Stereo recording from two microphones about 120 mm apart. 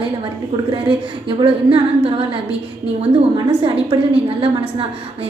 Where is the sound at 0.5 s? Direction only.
40° right (ahead or behind).